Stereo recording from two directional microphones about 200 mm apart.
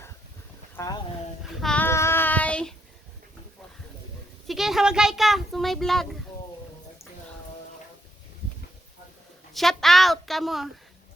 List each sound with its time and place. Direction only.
0.8 s speech: 15° left (ahead or behind)
1.6 s child singing: 10° left (ahead or behind)
4.4 s a child's voice: centre (ahead or behind)
9.5 s a child's voice: centre (ahead or behind)